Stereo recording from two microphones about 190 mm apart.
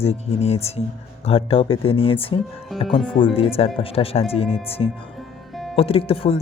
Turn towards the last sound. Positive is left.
turn(degrees=30)  # may be behind; listen again after turning